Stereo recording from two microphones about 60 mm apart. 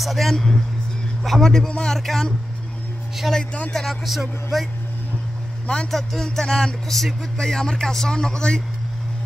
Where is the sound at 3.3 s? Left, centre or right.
Left.